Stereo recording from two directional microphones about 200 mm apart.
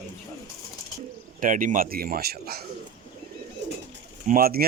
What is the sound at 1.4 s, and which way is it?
Speech, 40° right (ahead or behind).